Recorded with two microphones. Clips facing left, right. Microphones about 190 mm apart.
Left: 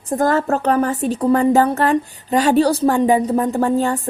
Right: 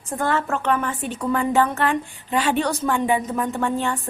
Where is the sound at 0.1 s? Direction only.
40° left (ahead or behind).